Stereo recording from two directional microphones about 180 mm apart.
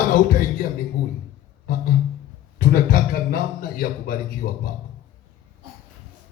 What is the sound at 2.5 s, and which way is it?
A man's voice, 55° left (ahead or behind).